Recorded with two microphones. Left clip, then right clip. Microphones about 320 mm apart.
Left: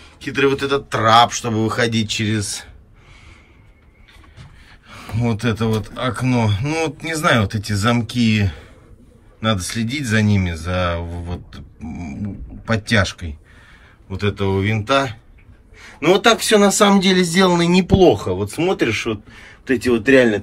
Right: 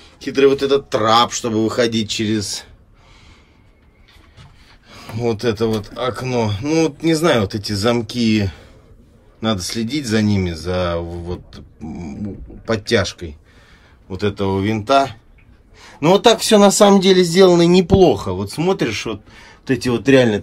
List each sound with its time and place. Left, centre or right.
0.0 s speech: centre
4.8 s speech: centre
18.0 s speech: centre